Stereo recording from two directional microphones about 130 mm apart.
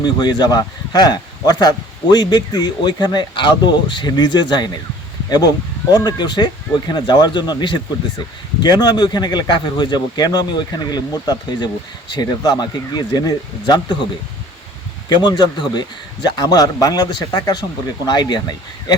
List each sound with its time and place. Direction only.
0.0 s a man's voice: 35° left (ahead or behind)
5.9 s a man's voice: 30° left (ahead or behind)
15.1 s a man's voice: 35° left (ahead or behind)